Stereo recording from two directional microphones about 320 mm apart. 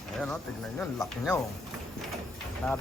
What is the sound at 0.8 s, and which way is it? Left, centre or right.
Speech, centre.